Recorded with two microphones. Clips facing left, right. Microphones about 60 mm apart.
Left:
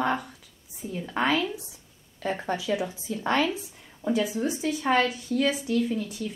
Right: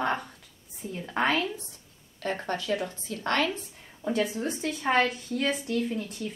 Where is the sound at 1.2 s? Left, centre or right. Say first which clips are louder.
Left 1 dB; centre.